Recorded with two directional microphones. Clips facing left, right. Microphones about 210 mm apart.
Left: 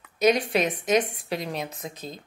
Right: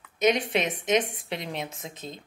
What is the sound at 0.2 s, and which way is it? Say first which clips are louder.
A woman's voice: left 2 dB; 20° right (ahead or behind).